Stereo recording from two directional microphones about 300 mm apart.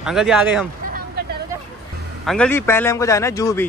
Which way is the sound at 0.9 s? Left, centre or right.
Right.